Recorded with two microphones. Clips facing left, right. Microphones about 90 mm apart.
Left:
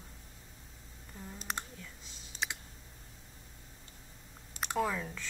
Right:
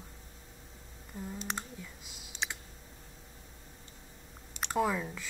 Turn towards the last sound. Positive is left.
turn(degrees=-10)  # may be behind; listen again after turning